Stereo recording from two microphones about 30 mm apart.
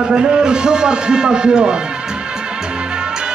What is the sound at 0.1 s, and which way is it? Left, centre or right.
A man's voice, right.